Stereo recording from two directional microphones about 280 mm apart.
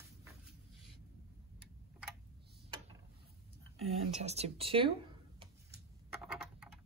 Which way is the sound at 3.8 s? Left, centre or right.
Right.